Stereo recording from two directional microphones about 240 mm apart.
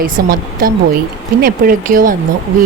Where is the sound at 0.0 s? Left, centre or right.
Right.